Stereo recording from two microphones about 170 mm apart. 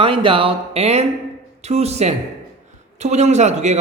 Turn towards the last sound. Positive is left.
turn(degrees=-40)  # may be behind; listen again after turning